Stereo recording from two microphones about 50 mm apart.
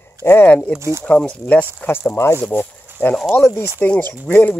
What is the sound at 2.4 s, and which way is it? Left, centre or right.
Speech, left.